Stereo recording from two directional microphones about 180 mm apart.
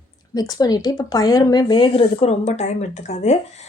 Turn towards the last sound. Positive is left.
turn(degrees=40)  # may be behind; listen again after turning